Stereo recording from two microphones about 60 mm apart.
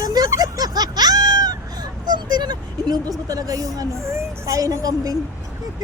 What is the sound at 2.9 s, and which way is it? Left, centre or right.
Speech, right.